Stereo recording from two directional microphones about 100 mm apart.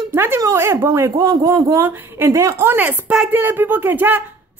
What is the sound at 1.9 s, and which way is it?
Speech, 20° right (ahead or behind).